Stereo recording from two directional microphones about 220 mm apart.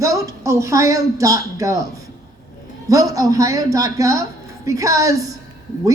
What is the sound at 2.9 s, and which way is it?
A woman's voice, 15° right (ahead or behind).